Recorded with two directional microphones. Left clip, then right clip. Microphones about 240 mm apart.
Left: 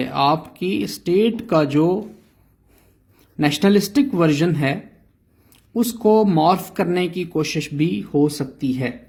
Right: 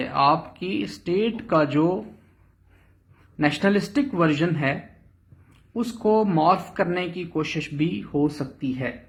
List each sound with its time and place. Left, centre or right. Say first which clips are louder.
0.0 s speech: left 2 dB; left
3.3 s speech: left 4 dB; left